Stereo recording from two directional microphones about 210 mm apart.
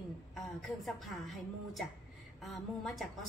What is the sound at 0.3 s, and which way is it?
A woman's voice, centre (ahead or behind).